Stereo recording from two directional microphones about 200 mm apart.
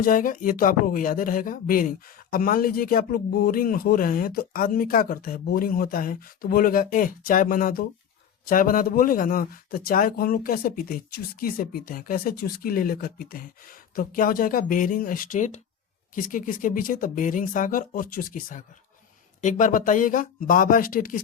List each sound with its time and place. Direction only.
0.0 s speech: 45° left (ahead or behind)